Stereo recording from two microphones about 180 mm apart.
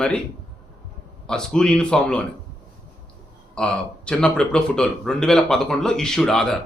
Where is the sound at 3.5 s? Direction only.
5° left (ahead or behind).